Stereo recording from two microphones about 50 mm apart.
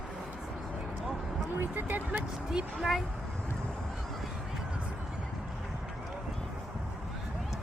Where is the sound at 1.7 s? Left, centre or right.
Right.